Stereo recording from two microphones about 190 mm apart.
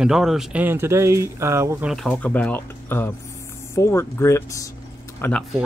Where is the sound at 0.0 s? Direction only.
Centre (ahead or behind).